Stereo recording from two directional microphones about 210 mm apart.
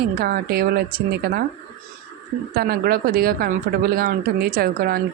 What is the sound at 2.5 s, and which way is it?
Speech, 45° right (ahead or behind).